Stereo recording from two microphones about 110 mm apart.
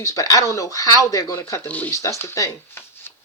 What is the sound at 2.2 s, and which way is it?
Speech, 25° left (ahead or behind).